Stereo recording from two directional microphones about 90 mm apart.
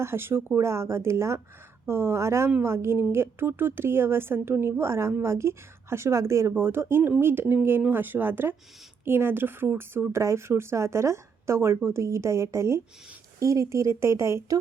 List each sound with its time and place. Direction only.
0.0 s a woman's voice: 25° right (ahead or behind)